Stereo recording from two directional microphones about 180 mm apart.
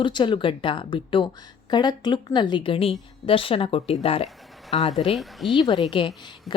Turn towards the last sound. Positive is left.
turn(degrees=25)  # may be behind; listen again after turning